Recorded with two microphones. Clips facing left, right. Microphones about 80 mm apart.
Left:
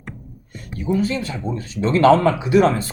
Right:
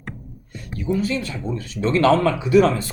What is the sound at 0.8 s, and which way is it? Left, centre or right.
Speech, left.